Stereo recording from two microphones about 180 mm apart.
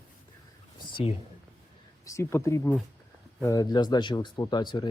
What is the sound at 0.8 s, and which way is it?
Speech, 30° left (ahead or behind).